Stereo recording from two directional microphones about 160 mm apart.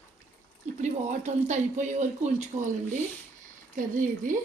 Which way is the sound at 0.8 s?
50° right (ahead or behind).